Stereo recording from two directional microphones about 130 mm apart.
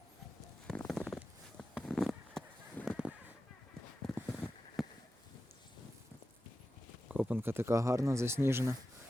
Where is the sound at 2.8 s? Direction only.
15° left (ahead or behind).